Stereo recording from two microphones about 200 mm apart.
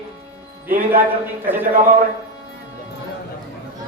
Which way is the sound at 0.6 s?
45° right (ahead or behind).